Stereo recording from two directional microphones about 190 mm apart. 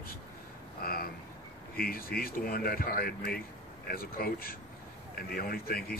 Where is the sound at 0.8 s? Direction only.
50° left (ahead or behind).